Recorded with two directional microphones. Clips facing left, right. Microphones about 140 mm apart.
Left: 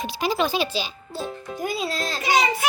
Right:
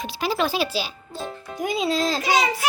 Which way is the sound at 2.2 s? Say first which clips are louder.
Even; centre (ahead or behind).